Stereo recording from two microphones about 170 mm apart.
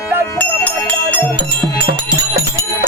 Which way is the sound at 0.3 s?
10° left (ahead or behind).